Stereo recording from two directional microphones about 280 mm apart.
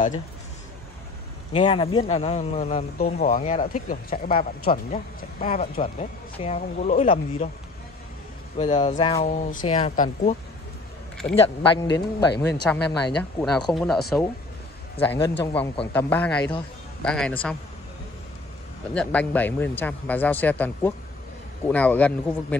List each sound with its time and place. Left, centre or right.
1.5 s speech: centre
8.5 s speech: left
11.4 s speech: centre
18.9 s speech: centre